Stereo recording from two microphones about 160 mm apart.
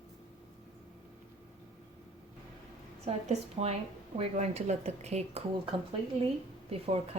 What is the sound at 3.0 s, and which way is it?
A woman's voice, 40° right (ahead or behind).